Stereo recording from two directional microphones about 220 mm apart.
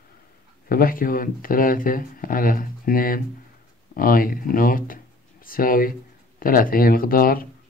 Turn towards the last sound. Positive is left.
turn(degrees=40)  # may be behind; listen again after turning